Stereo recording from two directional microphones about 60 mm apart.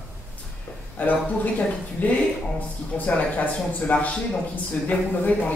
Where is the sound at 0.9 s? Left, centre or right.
Left.